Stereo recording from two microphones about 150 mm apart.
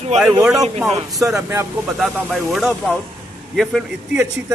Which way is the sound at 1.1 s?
5° right (ahead or behind).